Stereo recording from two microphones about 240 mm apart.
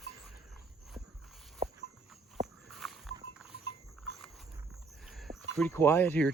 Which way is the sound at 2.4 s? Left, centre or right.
Centre.